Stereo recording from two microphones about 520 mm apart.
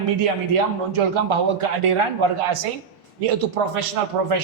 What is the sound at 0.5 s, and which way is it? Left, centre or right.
Speech, right.